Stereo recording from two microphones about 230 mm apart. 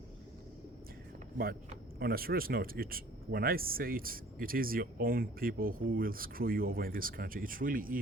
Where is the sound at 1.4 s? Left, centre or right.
Right.